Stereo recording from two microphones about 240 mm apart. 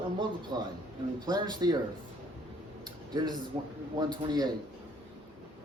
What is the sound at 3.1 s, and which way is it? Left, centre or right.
Speech, centre.